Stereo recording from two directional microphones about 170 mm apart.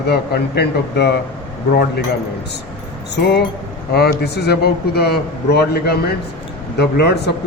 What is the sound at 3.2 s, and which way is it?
A man's voice, 75° left (ahead or behind).